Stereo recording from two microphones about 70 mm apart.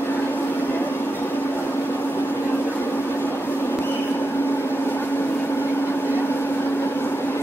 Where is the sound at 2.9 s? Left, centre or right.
Left.